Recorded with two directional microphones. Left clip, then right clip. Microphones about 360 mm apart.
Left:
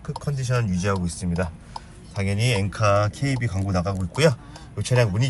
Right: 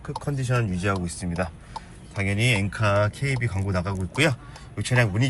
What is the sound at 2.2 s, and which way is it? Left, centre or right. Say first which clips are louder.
Speech: right 1 dB; centre.